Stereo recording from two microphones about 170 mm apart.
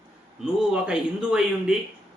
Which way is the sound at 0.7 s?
5° right (ahead or behind).